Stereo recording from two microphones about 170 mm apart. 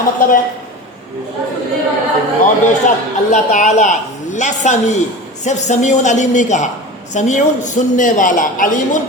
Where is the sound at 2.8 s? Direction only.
45° left (ahead or behind).